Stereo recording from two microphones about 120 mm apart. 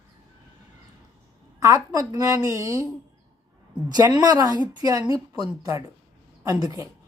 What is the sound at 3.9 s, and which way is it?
A woman's voice, 35° right (ahead or behind).